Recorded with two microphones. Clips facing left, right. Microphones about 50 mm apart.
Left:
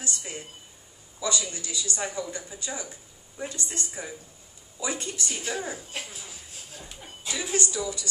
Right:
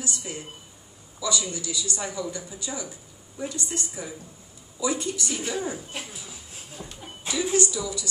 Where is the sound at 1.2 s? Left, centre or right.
Left.